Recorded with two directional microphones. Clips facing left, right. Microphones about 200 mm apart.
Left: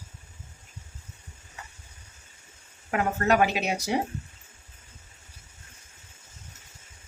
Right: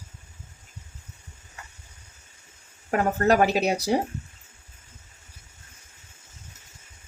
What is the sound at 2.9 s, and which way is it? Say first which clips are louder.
A woman's voice: right 3 dB; 35° right (ahead or behind).